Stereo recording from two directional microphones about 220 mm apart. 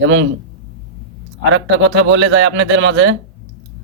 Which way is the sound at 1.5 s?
55° right (ahead or behind).